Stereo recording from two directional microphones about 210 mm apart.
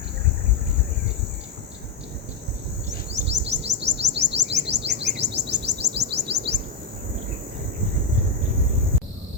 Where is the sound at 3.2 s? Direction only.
55° right (ahead or behind).